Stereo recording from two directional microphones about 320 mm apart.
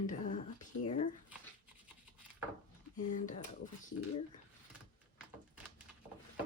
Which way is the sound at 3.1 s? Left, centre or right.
Left.